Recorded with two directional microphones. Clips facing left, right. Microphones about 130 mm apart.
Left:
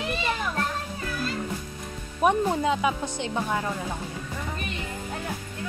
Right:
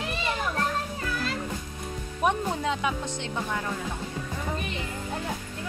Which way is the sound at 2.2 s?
5° left (ahead or behind).